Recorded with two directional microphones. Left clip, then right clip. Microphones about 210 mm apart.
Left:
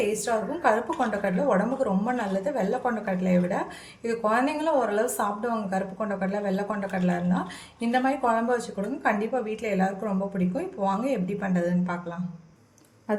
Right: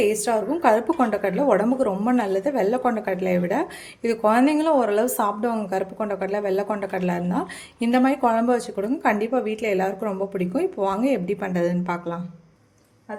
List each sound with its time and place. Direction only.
0.1 s a woman's voice: 45° right (ahead or behind)